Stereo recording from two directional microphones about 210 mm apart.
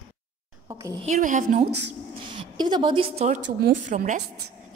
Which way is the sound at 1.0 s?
35° right (ahead or behind).